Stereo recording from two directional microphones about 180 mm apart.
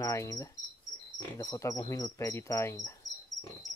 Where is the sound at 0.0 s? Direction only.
15° left (ahead or behind).